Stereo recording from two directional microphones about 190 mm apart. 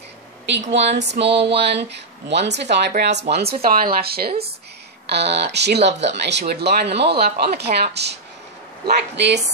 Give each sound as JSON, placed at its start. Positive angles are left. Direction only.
{"t": 0.5, "sound": "speech", "side_deg": -70}